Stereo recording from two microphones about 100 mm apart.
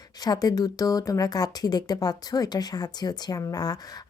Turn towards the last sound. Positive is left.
turn(degrees=40)  # may be behind; listen again after turning